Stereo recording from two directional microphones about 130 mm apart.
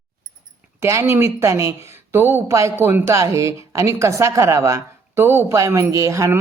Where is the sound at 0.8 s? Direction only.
20° right (ahead or behind).